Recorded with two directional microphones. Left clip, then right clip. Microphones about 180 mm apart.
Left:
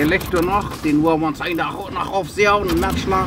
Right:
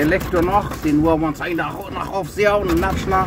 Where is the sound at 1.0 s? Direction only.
Centre (ahead or behind).